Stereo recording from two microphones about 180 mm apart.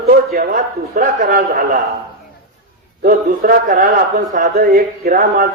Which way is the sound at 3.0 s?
55° right (ahead or behind).